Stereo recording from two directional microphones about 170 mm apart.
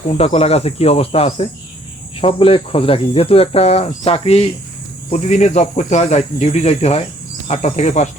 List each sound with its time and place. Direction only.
0.2 s speech: 35° left (ahead or behind)